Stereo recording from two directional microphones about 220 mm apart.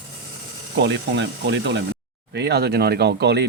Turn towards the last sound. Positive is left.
turn(degrees=-50)  # may be behind; listen again after turning